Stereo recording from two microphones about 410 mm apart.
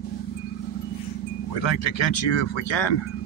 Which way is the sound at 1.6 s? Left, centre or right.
Left.